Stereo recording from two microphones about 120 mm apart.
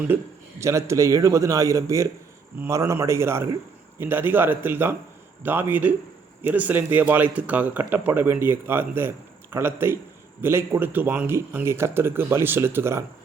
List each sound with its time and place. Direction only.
0.1 s speech: 15° right (ahead or behind)